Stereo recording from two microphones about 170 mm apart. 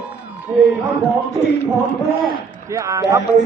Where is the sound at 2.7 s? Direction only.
20° right (ahead or behind).